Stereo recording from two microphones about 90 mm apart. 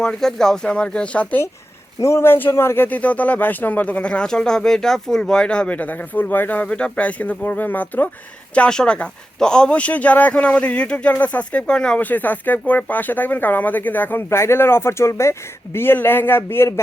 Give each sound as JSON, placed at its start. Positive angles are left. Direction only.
{"t": 0.0, "sound": "speech", "side_deg": 5}
{"t": 2.0, "sound": "a man's voice", "side_deg": 30}